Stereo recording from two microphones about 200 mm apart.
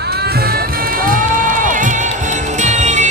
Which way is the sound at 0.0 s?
55° right (ahead or behind).